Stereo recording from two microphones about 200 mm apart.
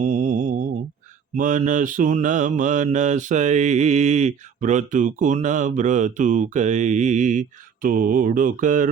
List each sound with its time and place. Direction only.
0.0 s mantra: 40° right (ahead or behind)